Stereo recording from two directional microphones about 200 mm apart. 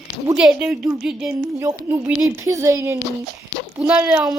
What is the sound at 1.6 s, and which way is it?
A woman's voice, 15° right (ahead or behind).